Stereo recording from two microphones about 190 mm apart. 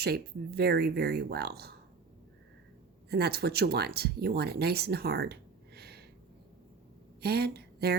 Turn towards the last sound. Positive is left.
turn(degrees=-60)  # may be behind; listen again after turning